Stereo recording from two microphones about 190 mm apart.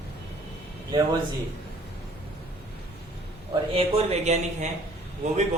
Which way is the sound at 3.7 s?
30° right (ahead or behind).